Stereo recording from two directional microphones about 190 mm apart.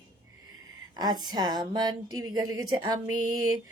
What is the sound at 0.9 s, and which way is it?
Speech, 20° right (ahead or behind).